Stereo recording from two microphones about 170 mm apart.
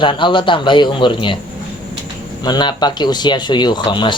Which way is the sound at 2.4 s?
25° left (ahead or behind).